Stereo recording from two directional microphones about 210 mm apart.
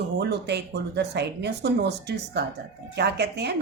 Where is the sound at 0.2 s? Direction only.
55° right (ahead or behind).